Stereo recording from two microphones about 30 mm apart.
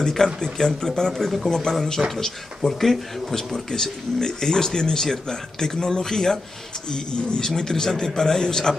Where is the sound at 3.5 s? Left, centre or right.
Centre.